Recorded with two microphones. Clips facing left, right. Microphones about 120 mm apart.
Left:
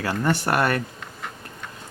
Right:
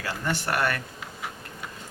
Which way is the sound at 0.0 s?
45° left (ahead or behind).